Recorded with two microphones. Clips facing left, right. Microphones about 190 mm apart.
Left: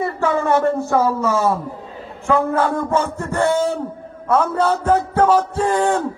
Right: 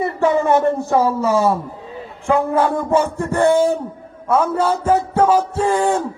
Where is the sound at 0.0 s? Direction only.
20° right (ahead or behind).